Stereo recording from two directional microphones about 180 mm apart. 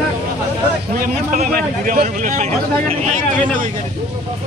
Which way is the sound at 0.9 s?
45° right (ahead or behind).